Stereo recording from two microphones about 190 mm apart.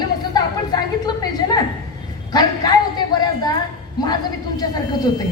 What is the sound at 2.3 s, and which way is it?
Speech, 20° left (ahead or behind).